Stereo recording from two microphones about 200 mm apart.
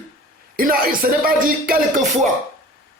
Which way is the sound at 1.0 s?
45° right (ahead or behind).